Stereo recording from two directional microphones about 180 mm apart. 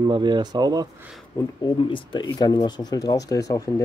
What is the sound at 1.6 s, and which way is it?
Speech, 25° left (ahead or behind).